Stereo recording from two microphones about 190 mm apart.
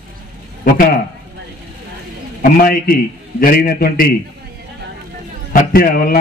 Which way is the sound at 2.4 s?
50° left (ahead or behind).